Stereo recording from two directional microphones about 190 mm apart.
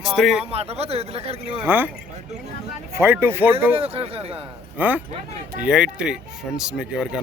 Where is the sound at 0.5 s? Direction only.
35° right (ahead or behind).